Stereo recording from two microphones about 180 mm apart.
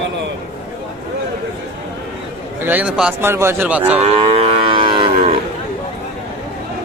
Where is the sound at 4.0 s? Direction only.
35° right (ahead or behind).